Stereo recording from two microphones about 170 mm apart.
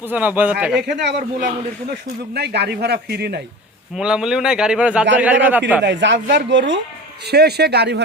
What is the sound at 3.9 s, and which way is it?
Speech, 5° right (ahead or behind).